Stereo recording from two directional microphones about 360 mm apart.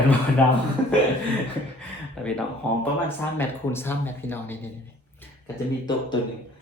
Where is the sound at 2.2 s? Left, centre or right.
Centre.